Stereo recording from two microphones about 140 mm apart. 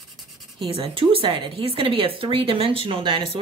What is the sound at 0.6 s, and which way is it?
Speech, 40° right (ahead or behind).